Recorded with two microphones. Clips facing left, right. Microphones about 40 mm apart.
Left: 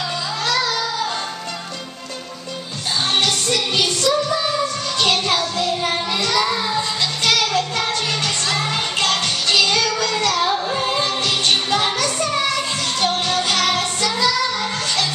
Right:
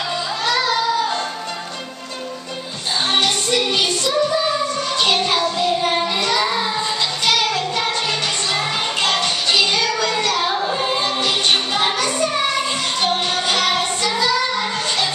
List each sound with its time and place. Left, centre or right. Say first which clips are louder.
0.5 s music: right 3 dB; centre
3.1 s music: right 1 dB; right